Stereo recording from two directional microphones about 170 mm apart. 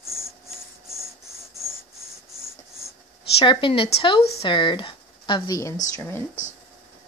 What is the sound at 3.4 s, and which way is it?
Speech, 30° left (ahead or behind).